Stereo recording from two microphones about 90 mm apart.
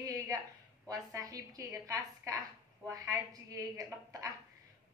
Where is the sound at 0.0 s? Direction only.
45° right (ahead or behind).